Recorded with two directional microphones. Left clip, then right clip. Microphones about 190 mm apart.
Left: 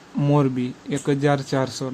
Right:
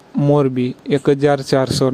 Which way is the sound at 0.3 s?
30° right (ahead or behind).